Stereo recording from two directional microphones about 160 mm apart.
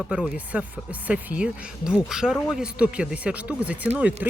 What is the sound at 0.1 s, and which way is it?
Speech, 5° right (ahead or behind).